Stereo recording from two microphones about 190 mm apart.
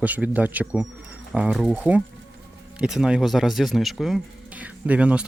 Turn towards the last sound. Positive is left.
turn(degrees=-5)  # may be behind; listen again after turning